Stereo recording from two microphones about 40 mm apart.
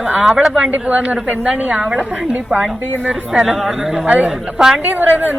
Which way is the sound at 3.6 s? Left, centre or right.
Centre.